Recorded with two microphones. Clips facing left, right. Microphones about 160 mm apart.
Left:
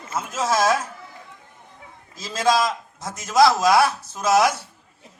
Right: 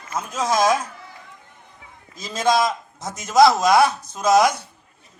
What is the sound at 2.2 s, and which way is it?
A man's voice, 20° right (ahead or behind).